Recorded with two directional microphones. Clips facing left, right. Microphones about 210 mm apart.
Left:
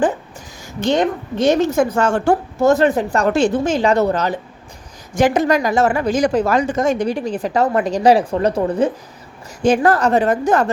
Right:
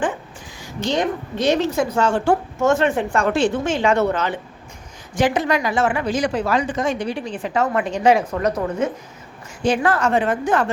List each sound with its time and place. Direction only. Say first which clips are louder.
0.8 s a woman's voice: left 4 dB; 55° left (ahead or behind)